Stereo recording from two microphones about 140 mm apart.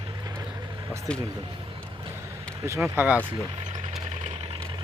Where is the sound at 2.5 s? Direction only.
20° right (ahead or behind).